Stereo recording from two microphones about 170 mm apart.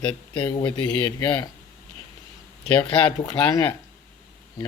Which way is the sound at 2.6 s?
5° left (ahead or behind).